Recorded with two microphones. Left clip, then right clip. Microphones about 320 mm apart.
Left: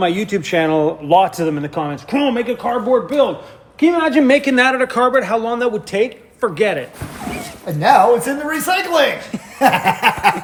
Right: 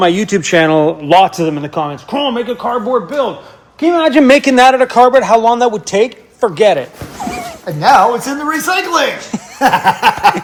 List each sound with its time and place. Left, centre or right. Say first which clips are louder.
0.0 s a man's voice: right 6 dB; right
3.9 s a man's voice: right 7 dB; right; by 10.3 s centre